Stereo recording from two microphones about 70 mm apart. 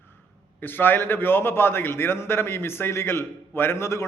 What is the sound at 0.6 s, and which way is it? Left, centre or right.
A man's voice, left.